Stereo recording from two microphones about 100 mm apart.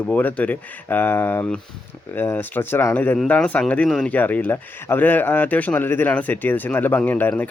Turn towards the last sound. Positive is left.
turn(degrees=15)  # may be behind; listen again after turning